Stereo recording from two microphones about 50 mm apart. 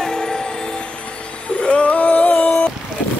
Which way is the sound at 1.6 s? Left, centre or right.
Centre.